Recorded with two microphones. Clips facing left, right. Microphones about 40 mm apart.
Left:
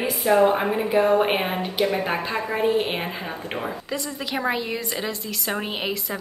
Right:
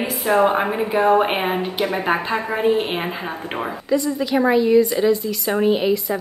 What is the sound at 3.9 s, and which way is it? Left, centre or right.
A woman's voice, centre.